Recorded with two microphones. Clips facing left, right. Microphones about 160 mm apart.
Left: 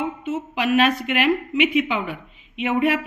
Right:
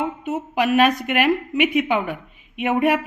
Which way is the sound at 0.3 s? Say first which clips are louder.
Right 2 dB; 45° right (ahead or behind).